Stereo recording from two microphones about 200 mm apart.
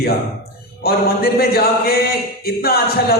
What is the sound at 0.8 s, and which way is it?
Speech, 50° left (ahead or behind).